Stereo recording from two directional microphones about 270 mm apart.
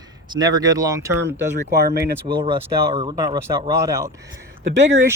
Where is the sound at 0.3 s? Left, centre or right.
Centre.